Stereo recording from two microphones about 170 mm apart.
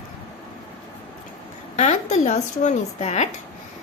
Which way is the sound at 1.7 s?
45° left (ahead or behind).